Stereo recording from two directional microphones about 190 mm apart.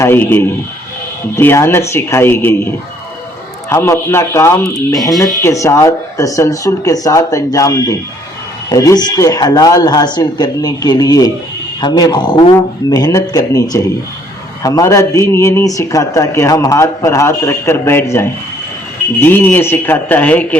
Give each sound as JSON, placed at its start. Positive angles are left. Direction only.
{"t": 0.0, "sound": "a man's voice", "side_deg": 10}
{"t": 3.7, "sound": "a man's voice", "side_deg": 15}